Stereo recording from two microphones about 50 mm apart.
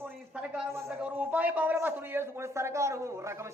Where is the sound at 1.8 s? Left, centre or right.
Right.